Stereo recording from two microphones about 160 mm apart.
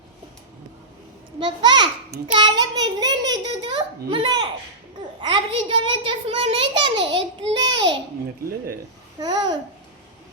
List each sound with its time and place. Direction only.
1.4 s a child's voice: 30° right (ahead or behind)
9.2 s a child's voice: 25° right (ahead or behind)